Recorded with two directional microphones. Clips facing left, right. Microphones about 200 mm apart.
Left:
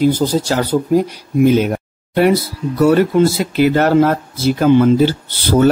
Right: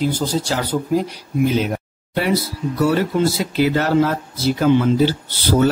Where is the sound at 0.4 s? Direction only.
45° left (ahead or behind).